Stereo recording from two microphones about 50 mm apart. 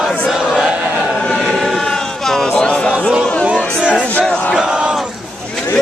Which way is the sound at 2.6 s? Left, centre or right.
Left.